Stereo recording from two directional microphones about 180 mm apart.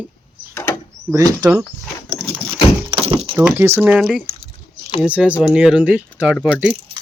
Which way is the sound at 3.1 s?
30° right (ahead or behind).